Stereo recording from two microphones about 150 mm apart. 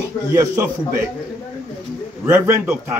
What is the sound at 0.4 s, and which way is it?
Speech, 20° right (ahead or behind).